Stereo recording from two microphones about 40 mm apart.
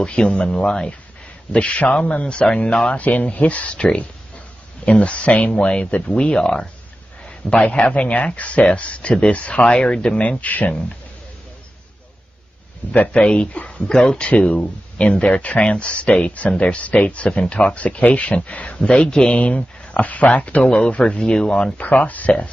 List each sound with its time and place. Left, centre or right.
0.0 s speech: left
3.0 s speech: left
7.2 s a sound: left
7.7 s speech: left
13.1 s speech: left
13.8 s speech: left
18.8 s speech: left
19.3 s speech: left
20.6 s speech: left
21.7 s speech: left